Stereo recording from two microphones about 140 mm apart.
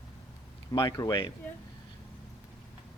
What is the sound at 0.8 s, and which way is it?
Speech, 30° left (ahead or behind).